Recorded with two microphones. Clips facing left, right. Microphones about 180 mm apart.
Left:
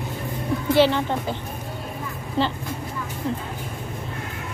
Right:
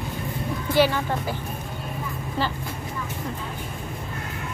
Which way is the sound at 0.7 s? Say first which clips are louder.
Left 2 dB; 20° left (ahead or behind).